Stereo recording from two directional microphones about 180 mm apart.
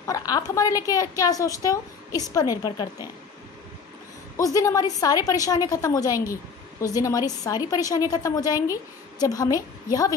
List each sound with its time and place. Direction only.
0.0 s a woman's voice: 20° left (ahead or behind)
4.4 s a woman's voice: 20° left (ahead or behind)